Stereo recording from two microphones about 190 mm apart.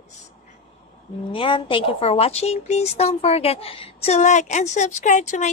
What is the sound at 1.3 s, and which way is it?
Speech, 25° left (ahead or behind).